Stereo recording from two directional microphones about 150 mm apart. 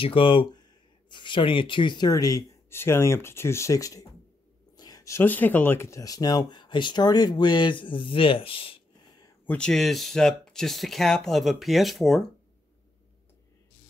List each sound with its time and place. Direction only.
0.0 s speech: 35° left (ahead or behind)
9.5 s speech: 5° left (ahead or behind)